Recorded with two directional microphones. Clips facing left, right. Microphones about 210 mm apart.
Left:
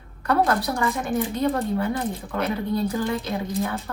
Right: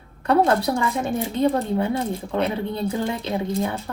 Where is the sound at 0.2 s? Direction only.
30° right (ahead or behind).